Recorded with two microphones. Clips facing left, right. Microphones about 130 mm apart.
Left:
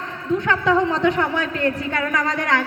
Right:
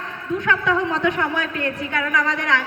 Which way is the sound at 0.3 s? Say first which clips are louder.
Left 2 dB; 30° left (ahead or behind).